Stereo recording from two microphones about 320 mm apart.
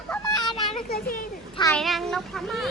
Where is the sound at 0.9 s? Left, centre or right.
Left.